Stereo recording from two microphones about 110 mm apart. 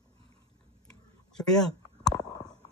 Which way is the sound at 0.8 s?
5° left (ahead or behind).